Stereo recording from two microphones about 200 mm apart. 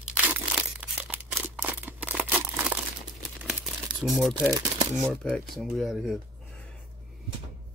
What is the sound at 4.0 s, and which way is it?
Speech, centre (ahead or behind).